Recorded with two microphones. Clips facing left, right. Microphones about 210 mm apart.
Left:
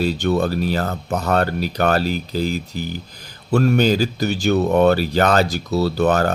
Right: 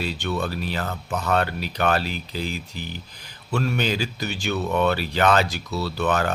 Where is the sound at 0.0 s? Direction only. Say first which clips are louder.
Left 8 dB; 40° left (ahead or behind).